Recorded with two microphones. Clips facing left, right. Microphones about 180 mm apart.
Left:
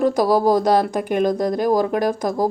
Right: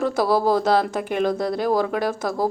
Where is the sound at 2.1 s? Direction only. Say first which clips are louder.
Left 3 dB; 15° left (ahead or behind).